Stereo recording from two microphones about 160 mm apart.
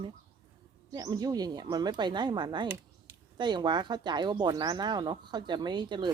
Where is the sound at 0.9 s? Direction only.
25° right (ahead or behind).